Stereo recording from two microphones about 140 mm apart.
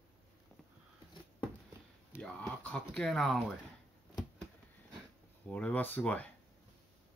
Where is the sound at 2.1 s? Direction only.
10° left (ahead or behind).